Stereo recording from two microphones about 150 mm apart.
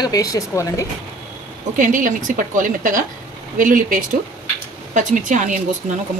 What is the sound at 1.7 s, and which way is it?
A woman's voice, 60° right (ahead or behind).